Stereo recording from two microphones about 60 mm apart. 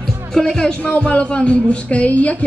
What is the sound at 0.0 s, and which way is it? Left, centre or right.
A man's voice, centre.